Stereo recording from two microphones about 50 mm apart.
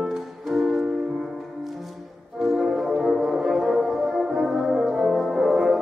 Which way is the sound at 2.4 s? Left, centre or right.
Centre.